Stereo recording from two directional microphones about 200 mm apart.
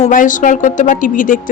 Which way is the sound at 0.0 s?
40° left (ahead or behind).